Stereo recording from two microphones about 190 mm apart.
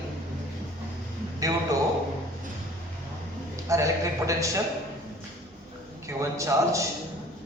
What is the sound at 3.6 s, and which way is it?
Speech, 15° right (ahead or behind).